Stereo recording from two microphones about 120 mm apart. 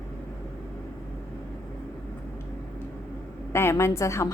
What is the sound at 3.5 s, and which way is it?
Speech, 20° left (ahead or behind).